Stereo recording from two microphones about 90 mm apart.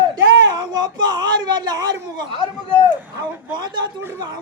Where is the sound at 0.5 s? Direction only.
50° right (ahead or behind).